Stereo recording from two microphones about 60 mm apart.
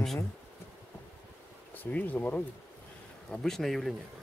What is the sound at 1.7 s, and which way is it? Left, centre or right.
Speech, left.